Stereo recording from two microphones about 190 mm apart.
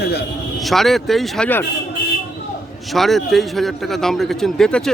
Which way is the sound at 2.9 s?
Centre (ahead or behind).